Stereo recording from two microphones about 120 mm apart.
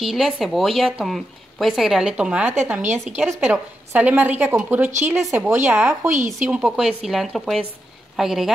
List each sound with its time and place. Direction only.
0.0 s a woman's voice: centre (ahead or behind)